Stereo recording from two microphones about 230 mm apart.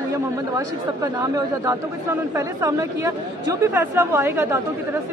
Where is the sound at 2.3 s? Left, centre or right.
Centre.